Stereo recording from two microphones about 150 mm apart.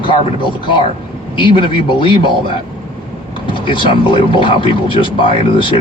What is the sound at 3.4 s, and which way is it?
Speech, 35° left (ahead or behind).